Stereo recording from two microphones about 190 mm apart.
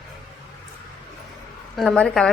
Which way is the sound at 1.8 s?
5° left (ahead or behind).